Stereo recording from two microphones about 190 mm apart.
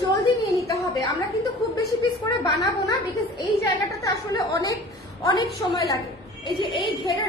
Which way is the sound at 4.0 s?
15° left (ahead or behind).